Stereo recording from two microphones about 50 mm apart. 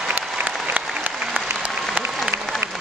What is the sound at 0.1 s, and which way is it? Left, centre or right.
Applause, right.